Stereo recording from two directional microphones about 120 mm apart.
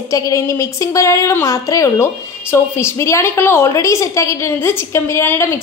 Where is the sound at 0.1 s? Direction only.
25° left (ahead or behind).